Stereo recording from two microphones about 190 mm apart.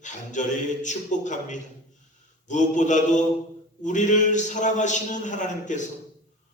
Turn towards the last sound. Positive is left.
turn(degrees=40)  # may be behind; listen again after turning